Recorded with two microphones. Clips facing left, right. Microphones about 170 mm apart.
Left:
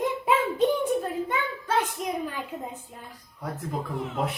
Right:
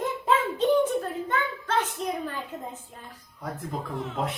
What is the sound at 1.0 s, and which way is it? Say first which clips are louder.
A woman's voice: even; 10° left (ahead or behind).